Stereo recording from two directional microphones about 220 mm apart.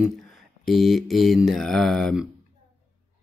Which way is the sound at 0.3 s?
Centre (ahead or behind).